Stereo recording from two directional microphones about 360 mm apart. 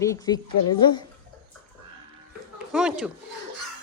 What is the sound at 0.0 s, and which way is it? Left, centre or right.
Speech, centre.